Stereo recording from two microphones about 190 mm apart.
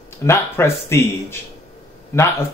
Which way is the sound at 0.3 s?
15° left (ahead or behind).